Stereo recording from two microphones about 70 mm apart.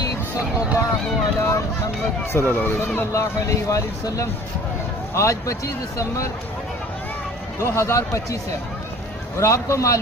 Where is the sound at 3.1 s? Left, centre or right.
Left.